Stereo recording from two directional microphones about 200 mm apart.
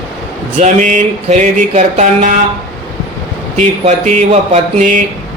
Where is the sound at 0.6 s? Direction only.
40° right (ahead or behind).